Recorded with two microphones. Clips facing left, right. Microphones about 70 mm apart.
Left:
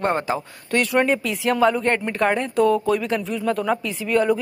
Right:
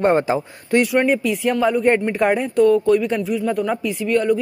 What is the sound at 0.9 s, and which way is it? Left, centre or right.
Speech, centre.